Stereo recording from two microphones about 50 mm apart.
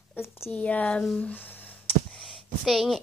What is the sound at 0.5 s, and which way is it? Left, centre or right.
Speech, left.